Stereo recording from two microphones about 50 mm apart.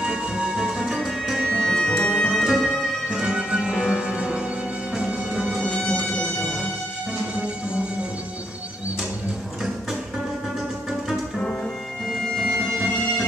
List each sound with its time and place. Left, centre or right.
0.0 s music: centre
1.0 s music: centre
1.4 s music: centre
2.4 s music: centre
3.1 s music: centre
5.7 s music: centre
7.3 s music: right
11.3 s music: centre